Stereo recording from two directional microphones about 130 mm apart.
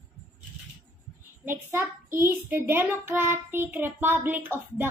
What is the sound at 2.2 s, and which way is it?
Child singing, 15° right (ahead or behind).